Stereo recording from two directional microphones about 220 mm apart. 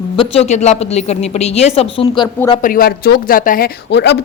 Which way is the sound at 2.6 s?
40° left (ahead or behind).